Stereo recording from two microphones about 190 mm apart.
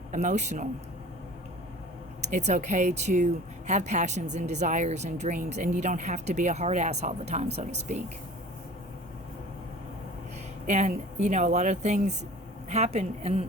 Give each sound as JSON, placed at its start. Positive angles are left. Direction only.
{"t": 0.1, "sound": "a woman's voice", "side_deg": -40}
{"t": 2.2, "sound": "a woman's voice", "side_deg": -35}
{"t": 10.7, "sound": "a woman's voice", "side_deg": -40}